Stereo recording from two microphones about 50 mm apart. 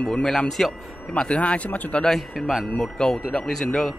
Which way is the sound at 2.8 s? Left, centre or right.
Centre.